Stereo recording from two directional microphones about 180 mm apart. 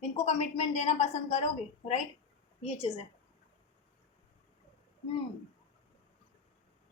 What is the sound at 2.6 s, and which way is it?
Speech, 30° left (ahead or behind).